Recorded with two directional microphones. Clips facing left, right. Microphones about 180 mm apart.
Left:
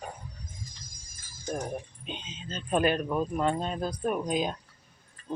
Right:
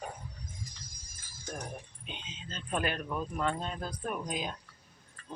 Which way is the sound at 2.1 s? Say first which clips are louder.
Left 6 dB; 25° left (ahead or behind).